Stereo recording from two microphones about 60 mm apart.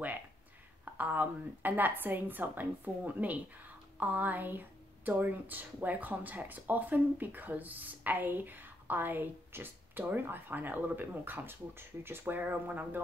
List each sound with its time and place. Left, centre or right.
0.9 s a woman's voice: right